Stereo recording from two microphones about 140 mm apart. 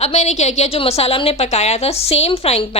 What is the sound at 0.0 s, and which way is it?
A woman's voice, 50° left (ahead or behind).